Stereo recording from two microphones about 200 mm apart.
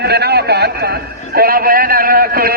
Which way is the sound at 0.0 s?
55° right (ahead or behind).